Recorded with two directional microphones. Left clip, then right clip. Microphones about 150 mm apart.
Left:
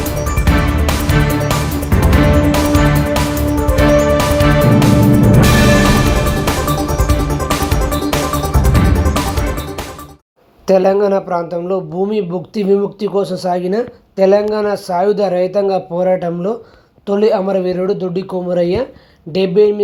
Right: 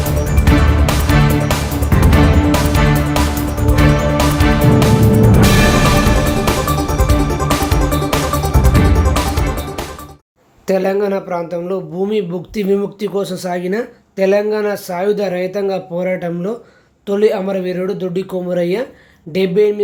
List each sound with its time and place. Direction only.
0.0 s music: centre (ahead or behind)
10.7 s a man's voice: centre (ahead or behind)